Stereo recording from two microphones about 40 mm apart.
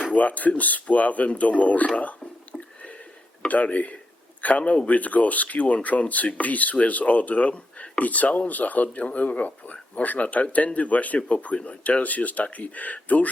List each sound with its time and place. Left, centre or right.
0.0 s speech: left
2.0 s a sound: left
3.4 s a man's voice: left